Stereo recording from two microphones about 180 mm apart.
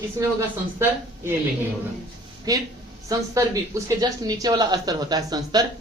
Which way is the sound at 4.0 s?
20° right (ahead or behind).